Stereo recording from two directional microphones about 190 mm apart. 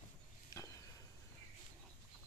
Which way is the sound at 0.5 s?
20° left (ahead or behind).